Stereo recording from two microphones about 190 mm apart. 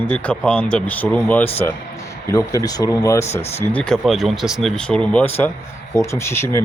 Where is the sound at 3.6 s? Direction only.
5° left (ahead or behind).